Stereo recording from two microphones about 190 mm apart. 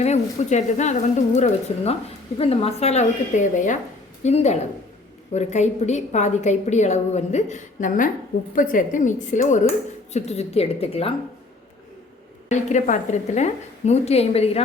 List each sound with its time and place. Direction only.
0.0 s a woman's voice: 35° left (ahead or behind)
12.5 s a woman's voice: 40° left (ahead or behind)